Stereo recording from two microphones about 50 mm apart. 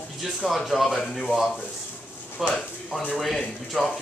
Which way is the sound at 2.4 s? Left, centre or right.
Centre.